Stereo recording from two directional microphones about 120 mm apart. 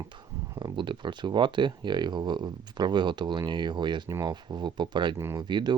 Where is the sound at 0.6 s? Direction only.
40° right (ahead or behind).